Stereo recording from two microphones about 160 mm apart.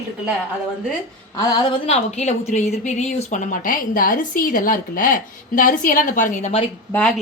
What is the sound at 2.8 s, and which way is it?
A woman's voice, 50° left (ahead or behind).